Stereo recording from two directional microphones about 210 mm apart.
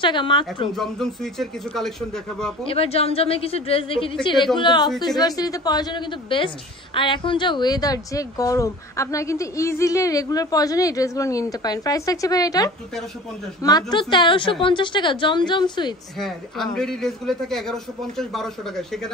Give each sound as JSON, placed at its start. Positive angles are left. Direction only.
{"t": 0.0, "sound": "a woman's voice", "side_deg": 25}
{"t": 0.7, "sound": "a man's voice", "side_deg": 0}
{"t": 2.6, "sound": "a woman's voice", "side_deg": 25}
{"t": 16.2, "sound": "a man's voice", "side_deg": 0}